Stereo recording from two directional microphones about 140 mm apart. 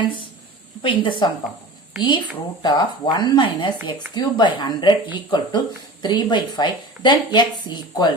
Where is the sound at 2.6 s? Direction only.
30° left (ahead or behind).